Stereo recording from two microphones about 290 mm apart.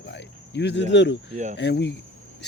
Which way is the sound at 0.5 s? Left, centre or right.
Left.